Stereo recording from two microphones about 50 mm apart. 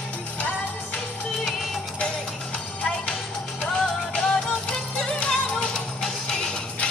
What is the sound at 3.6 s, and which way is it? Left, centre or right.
Music, left.